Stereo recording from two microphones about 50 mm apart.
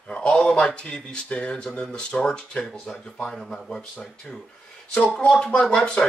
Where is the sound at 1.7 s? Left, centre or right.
Centre.